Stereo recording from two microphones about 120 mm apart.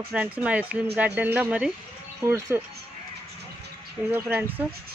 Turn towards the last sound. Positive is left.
turn(degrees=-15)  # may be behind; listen again after turning